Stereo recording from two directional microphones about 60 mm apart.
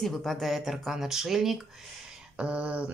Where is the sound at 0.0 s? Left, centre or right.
Centre.